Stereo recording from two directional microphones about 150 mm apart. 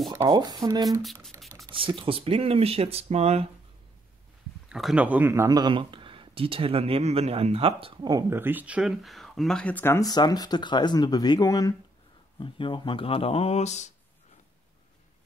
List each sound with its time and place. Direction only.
0.2 s speech: 25° right (ahead or behind); by 3.4 s 45° right (ahead or behind)
4.6 s speech: 5° right (ahead or behind); by 11.7 s 20° left (ahead or behind)
12.4 s speech: 35° left (ahead or behind); by 13.9 s 50° left (ahead or behind)